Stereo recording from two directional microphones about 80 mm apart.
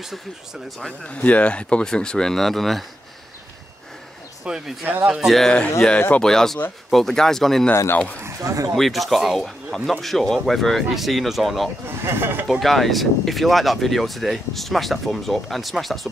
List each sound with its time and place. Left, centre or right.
0.7 s speech: centre
4.5 s speech: centre
5.3 s speech: centre
7.7 s speech: left
8.2 s speech: right
8.7 s speech: centre
12.0 s speech: right
12.4 s speech: centre